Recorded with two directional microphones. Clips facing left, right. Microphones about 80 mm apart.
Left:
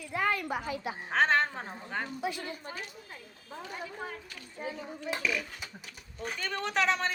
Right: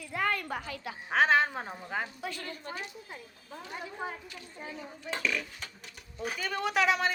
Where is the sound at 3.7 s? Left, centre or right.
Centre.